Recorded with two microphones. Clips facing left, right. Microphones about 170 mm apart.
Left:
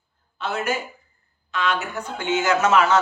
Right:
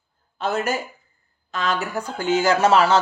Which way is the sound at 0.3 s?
40° right (ahead or behind).